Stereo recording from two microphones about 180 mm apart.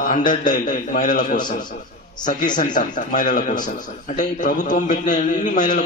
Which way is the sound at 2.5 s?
45° left (ahead or behind).